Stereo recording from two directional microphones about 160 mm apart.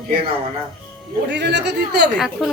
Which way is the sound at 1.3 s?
90° right.